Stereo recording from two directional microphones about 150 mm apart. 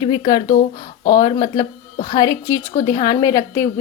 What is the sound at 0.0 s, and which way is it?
A woman's voice, 30° left (ahead or behind).